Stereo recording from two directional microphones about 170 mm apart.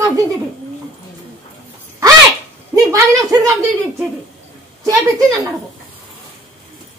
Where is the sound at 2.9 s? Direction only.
20° right (ahead or behind).